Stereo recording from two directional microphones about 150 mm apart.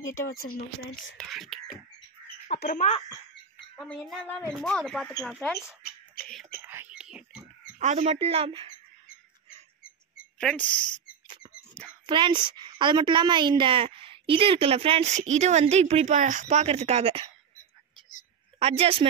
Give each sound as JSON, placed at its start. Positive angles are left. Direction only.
{"t": 1.1, "sound": "speech", "side_deg": 0}
{"t": 2.5, "sound": "speech", "side_deg": 90}
{"t": 3.7, "sound": "speech", "side_deg": 5}
{"t": 6.6, "sound": "whispering", "side_deg": -15}
{"t": 7.8, "sound": "a woman's voice", "side_deg": -50}
{"t": 10.4, "sound": "speech", "side_deg": 10}
{"t": 11.2, "sound": "dog", "side_deg": -30}
{"t": 11.8, "sound": "a sound", "side_deg": 10}
{"t": 12.1, "sound": "a woman's voice", "side_deg": -30}
{"t": 18.6, "sound": "a woman's voice", "side_deg": -40}